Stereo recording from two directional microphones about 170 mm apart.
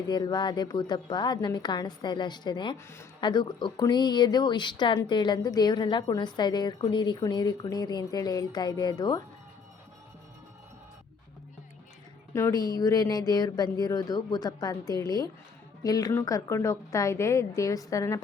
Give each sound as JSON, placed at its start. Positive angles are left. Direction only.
{"t": 0.1, "sound": "speech", "side_deg": 25}
{"t": 12.3, "sound": "speech", "side_deg": 20}